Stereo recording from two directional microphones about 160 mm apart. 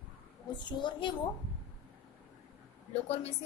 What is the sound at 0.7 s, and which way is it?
Speech, 30° left (ahead or behind).